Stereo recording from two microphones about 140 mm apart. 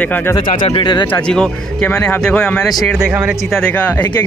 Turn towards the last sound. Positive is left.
turn(degrees=15)  # may be behind; listen again after turning